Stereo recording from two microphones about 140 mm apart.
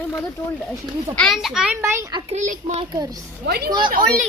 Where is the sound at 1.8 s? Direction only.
20° right (ahead or behind).